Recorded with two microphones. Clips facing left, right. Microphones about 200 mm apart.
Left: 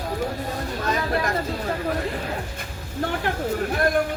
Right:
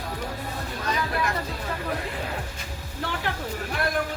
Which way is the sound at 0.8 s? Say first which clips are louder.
Left 3 dB; 45° left (ahead or behind).